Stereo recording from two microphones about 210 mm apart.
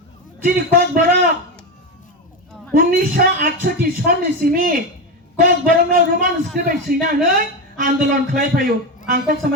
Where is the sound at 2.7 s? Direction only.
40° right (ahead or behind).